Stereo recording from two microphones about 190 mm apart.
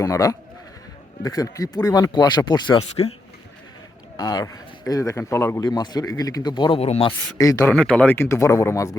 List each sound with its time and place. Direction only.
0.0 s a man's voice: 15° left (ahead or behind)
4.2 s a man's voice: 20° left (ahead or behind)
7.3 s speech: 15° left (ahead or behind)
7.7 s speech: 5° left (ahead or behind)